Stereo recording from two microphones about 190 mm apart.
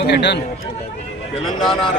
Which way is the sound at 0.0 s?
60° left (ahead or behind).